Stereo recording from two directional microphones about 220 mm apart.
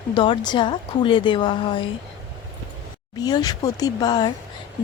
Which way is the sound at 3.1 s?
15° left (ahead or behind).